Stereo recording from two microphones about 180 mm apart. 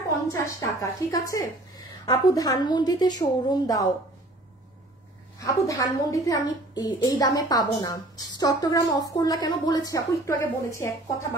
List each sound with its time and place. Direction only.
0.3 s a woman's voice: 20° left (ahead or behind)
5.4 s a woman's voice: 20° left (ahead or behind)